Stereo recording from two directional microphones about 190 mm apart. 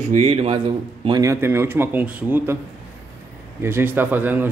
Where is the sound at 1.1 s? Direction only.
20° right (ahead or behind).